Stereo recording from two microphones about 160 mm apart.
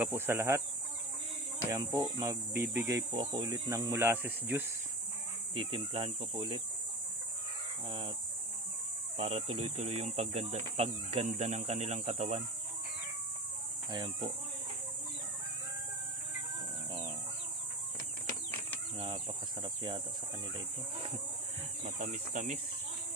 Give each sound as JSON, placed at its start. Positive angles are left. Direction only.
{"t": 0.0, "sound": "speech", "side_deg": -15}
{"t": 1.7, "sound": "cricket", "side_deg": -20}
{"t": 3.2, "sound": "speech", "side_deg": -30}
{"t": 5.5, "sound": "speech", "side_deg": -35}
{"t": 7.9, "sound": "speech", "side_deg": -30}
{"t": 9.1, "sound": "speech", "side_deg": -40}
{"t": 13.9, "sound": "cricket", "side_deg": -30}
{"t": 18.9, "sound": "speech", "side_deg": -35}
{"t": 21.9, "sound": "speech", "side_deg": -50}